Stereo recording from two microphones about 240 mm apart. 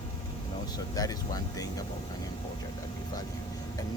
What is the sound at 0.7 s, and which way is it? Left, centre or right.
Speech, centre.